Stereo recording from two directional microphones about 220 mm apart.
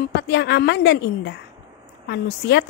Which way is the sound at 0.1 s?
50° left (ahead or behind).